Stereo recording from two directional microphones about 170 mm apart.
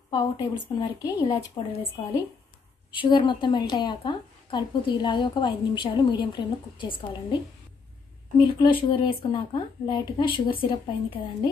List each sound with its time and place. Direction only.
0.1 s a woman's voice: 20° left (ahead or behind)
1.2 s speech: 30° left (ahead or behind)
2.9 s a woman's voice: 30° left (ahead or behind)
8.5 s a woman's voice: 30° left (ahead or behind)